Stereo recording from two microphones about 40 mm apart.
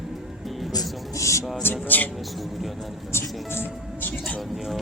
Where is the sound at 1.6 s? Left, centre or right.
Left.